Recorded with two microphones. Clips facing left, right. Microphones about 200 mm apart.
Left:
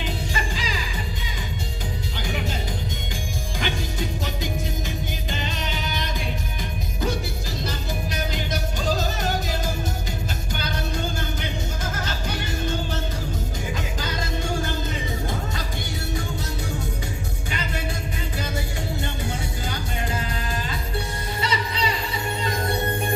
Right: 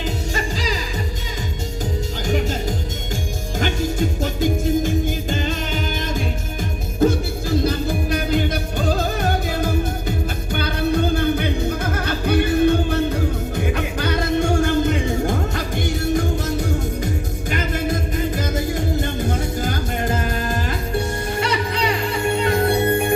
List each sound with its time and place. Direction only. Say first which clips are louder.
0.0 s music: right 4 dB; 40° right (ahead or behind)
2.2 s music: right 7 dB; 45° right (ahead or behind)
7.6 s music: right 9 dB; 55° right (ahead or behind)
19.6 s music: right 7 dB; 45° right (ahead or behind); by 23.1 s 65° right (ahead or behind)